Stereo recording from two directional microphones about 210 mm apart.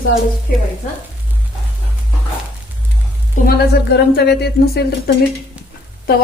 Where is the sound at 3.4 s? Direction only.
50° left (ahead or behind).